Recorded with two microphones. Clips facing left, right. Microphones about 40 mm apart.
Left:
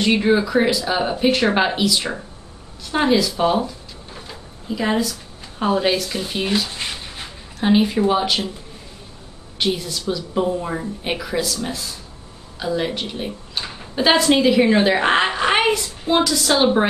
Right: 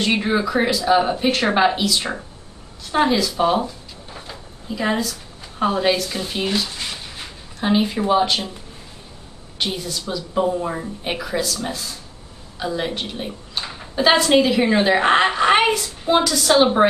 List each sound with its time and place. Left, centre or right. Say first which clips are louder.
0.0 s a woman's voice: left 3 dB; centre
3.3 s a sound: even; centre
5.6 s a woman's voice: even; centre
6.7 s a sound: left 1 dB; left
7.6 s a woman's voice: left 3 dB; centre
9.6 s a woman's voice: left 3 dB; centre